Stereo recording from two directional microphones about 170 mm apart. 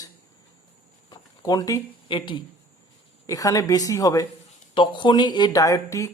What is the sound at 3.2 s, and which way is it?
Speech, 20° left (ahead or behind).